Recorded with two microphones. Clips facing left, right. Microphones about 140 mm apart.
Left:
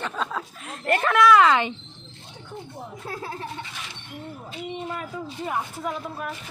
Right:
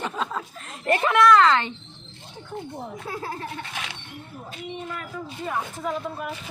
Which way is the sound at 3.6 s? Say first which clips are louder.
Right 4 dB; 70° right (ahead or behind).